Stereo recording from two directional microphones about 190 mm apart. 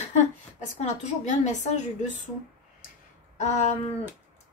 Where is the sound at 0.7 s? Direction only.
35° left (ahead or behind).